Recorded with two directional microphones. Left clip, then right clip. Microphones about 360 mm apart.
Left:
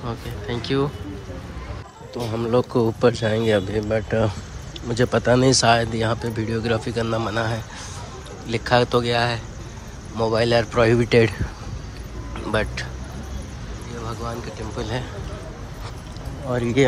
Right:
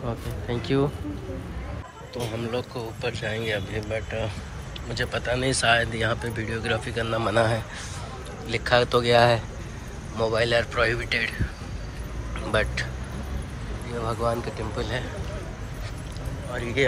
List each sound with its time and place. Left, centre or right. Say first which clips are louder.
0.0 s speech: left 2 dB; centre
2.1 s speech: left 8 dB; centre
12.4 s speech: left 1 dB; centre
14.0 s speech: right 5 dB; centre
16.5 s speech: left 6 dB; centre